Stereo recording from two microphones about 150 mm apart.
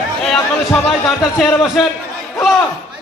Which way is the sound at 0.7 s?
Centre (ahead or behind).